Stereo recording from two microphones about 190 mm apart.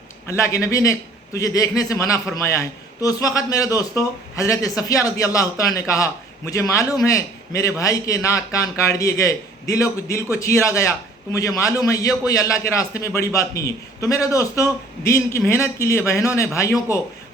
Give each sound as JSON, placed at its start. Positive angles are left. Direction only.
{"t": 0.3, "sound": "a man's voice", "side_deg": 15}